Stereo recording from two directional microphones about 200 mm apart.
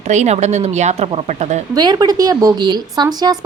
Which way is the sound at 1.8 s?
20° right (ahead or behind).